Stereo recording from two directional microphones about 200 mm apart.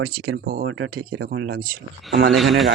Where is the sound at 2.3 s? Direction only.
Centre (ahead or behind).